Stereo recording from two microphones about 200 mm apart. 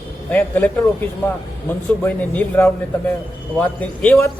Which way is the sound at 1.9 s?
10° left (ahead or behind).